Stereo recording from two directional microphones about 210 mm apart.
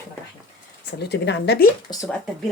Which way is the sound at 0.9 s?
50° left (ahead or behind).